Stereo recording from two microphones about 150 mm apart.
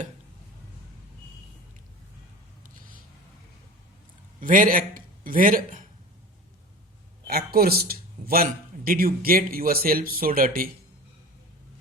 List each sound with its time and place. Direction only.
4.4 s a man's voice: 65° right (ahead or behind)
7.3 s speech: 90° right; by 10.7 s 70° right (ahead or behind)